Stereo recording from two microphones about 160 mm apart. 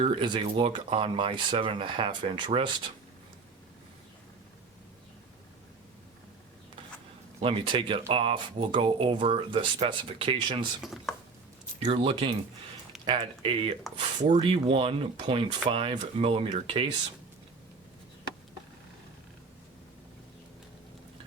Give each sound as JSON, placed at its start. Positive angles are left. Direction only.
{"t": 0.0, "sound": "speech", "side_deg": -35}
{"t": 7.4, "sound": "speech", "side_deg": -30}
{"t": 11.1, "sound": "a sound", "side_deg": 0}
{"t": 11.8, "sound": "speech", "side_deg": -40}